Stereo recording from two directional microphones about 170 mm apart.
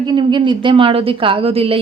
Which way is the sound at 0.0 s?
25° right (ahead or behind).